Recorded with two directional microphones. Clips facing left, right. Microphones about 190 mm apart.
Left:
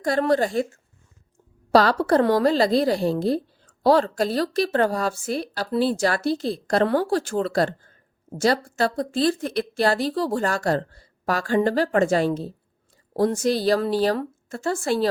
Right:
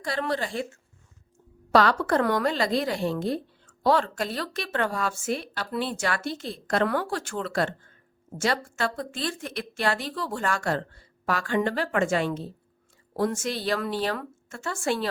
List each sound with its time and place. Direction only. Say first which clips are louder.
0.0 s a woman's voice: left 8 dB; 45° left (ahead or behind)